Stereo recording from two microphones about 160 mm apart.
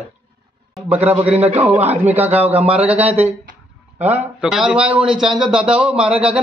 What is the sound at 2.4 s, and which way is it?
A man's voice, 10° right (ahead or behind).